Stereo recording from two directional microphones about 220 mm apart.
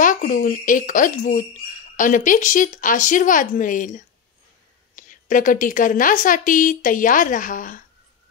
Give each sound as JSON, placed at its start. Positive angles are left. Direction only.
{"t": 0.0, "sound": "speech", "side_deg": 35}